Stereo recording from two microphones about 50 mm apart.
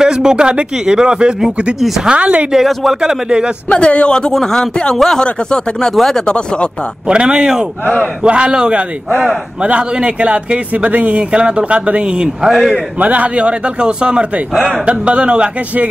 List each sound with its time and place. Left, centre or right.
0.0 s a man's voice: centre
2.5 s a man's voice: centre
3.0 s speech: centre
3.6 s speech: left; by 6.2 s centre
6.2 s speech: left
7.1 s a man's voice: centre
12.4 s speech: centre
13.0 s a man's voice: right